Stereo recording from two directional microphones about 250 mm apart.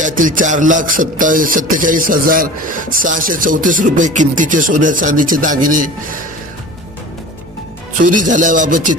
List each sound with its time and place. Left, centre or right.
0.0 s music: right
8.3 s music: right